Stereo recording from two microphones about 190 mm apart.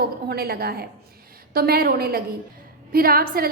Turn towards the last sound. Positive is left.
turn(degrees=-50)  # may be behind; listen again after turning